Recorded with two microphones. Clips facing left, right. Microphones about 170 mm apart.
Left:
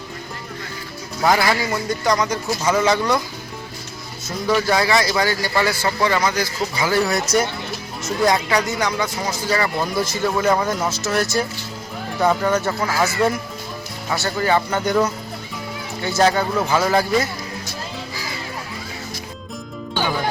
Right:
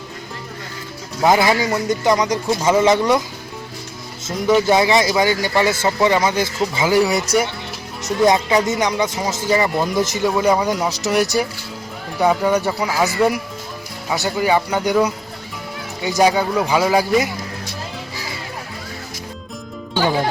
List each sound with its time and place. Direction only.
1.2 s speech: 20° right (ahead or behind)
4.3 s a man's voice: 20° right (ahead or behind)